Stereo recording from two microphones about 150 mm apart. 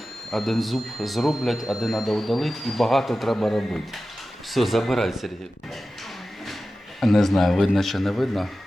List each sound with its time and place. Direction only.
0.3 s speech: centre (ahead or behind)
7.0 s speech: centre (ahead or behind)